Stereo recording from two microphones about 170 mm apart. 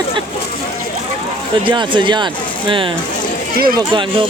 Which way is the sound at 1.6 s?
30° right (ahead or behind).